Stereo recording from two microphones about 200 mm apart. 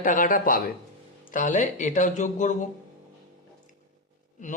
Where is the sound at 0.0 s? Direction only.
40° left (ahead or behind).